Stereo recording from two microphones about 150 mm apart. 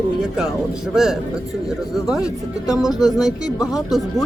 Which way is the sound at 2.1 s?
20° left (ahead or behind).